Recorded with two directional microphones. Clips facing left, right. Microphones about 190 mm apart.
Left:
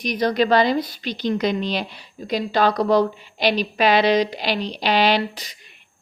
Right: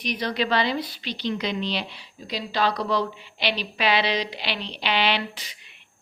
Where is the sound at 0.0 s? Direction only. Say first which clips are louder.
Left 7 dB; 45° left (ahead or behind).